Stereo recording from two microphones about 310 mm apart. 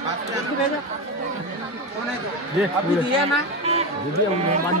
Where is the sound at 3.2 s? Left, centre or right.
Centre.